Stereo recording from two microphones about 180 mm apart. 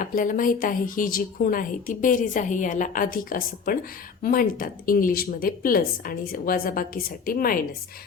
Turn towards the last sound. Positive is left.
turn(degrees=55)  # may be behind; listen again after turning